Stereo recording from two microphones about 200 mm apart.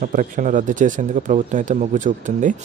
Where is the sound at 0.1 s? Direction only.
40° right (ahead or behind).